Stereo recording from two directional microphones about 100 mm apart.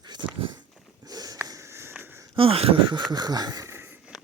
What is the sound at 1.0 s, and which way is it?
Sniff, 40° right (ahead or behind).